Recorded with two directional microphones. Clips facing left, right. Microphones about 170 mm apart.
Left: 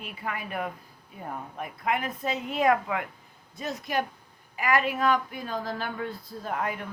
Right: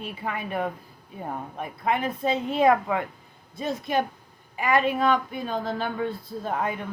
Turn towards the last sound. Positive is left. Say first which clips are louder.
# right 3 dB
turn(degrees=-25)  # may be behind; listen again after turning